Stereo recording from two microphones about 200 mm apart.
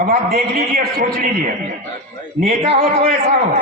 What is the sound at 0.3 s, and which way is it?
Speech, 45° right (ahead or behind).